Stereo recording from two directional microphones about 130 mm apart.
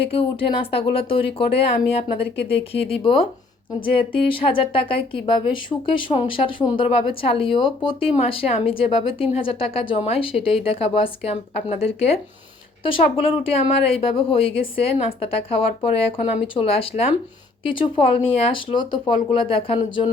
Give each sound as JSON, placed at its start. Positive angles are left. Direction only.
{"t": 0.1, "sound": "speech", "side_deg": 45}
{"t": 4.4, "sound": "speech", "side_deg": 45}
{"t": 16.1, "sound": "speech", "side_deg": 60}
{"t": 17.7, "sound": "speech", "side_deg": 40}